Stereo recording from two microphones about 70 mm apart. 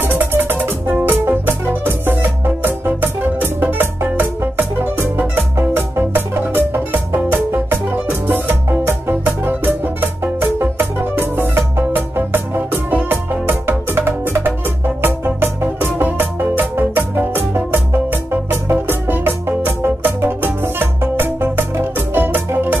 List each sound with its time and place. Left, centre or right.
0.0 s music: right